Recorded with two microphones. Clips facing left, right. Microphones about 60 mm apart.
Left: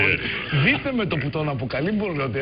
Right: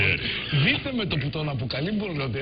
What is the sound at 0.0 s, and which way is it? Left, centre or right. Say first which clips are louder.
Speech: left 4 dB; left.